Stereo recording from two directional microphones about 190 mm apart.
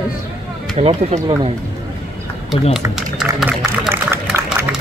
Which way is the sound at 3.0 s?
Centre (ahead or behind).